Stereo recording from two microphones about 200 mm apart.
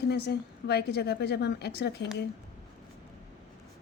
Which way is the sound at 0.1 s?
55° left (ahead or behind).